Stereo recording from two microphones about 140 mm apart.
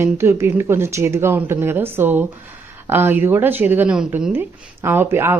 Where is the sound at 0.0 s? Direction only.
20° right (ahead or behind).